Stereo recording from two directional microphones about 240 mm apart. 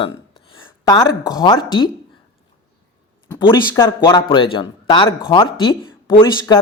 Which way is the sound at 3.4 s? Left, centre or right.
Centre.